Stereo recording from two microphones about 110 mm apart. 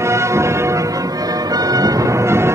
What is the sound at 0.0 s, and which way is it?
Music, 25° right (ahead or behind).